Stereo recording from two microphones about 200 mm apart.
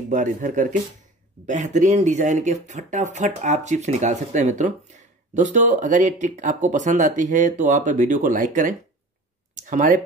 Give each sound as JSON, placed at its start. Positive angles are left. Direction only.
{"t": 0.1, "sound": "speech", "side_deg": -40}